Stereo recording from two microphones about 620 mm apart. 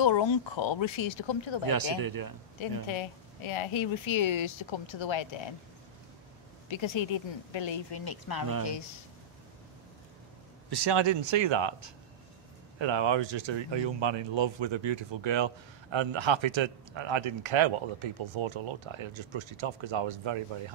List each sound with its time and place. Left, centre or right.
0.0 s a woman's voice: left
2.0 s speech: right
2.9 s a woman's voice: left
6.7 s a woman's voice: left
10.7 s speech: right